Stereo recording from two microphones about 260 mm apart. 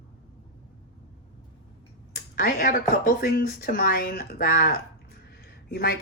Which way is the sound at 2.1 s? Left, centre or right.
Left.